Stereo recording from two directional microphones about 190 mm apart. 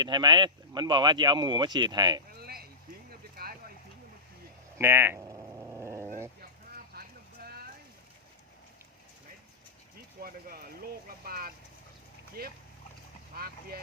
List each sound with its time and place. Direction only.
0.0 s speech: 25° right (ahead or behind)
2.4 s a sound: 55° right (ahead or behind)
4.8 s speech: 10° right (ahead or behind)
5.7 s dog: 15° right (ahead or behind)
6.9 s vehicle: 55° right (ahead or behind)
7.4 s a sound: 55° right (ahead or behind)
10.2 s vehicle: 50° right (ahead or behind)
12.4 s speech: 50° right (ahead or behind)
13.3 s vehicle: 50° right (ahead or behind)